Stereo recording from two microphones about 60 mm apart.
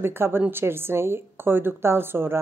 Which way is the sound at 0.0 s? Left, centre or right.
Right.